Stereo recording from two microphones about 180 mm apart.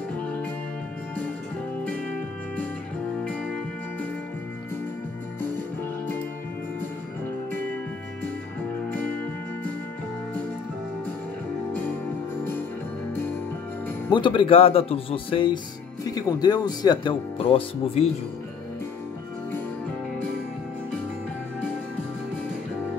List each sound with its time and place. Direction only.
14.1 s speech: 25° left (ahead or behind)